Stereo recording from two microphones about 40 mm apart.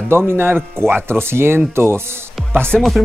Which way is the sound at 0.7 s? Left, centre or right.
Right.